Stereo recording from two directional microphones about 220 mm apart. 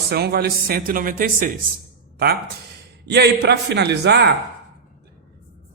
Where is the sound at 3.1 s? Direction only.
50° right (ahead or behind).